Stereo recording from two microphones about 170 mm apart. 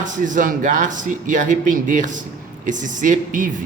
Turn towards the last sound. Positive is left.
turn(degrees=-50)  # may be behind; listen again after turning